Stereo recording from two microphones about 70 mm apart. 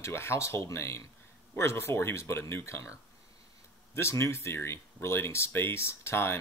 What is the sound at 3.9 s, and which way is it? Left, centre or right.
Speech, left.